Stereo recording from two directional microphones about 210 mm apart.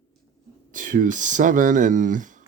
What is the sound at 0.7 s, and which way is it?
Speech, 40° right (ahead or behind).